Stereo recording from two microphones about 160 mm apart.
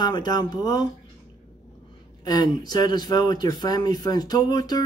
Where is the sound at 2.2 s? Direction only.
25° left (ahead or behind).